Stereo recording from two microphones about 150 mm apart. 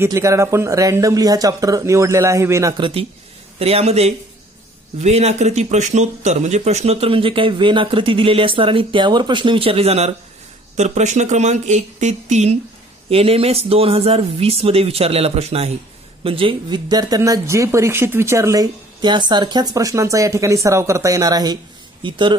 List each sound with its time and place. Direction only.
0.0 s speech: 20° right (ahead or behind)
2.8 s speech: 40° right (ahead or behind)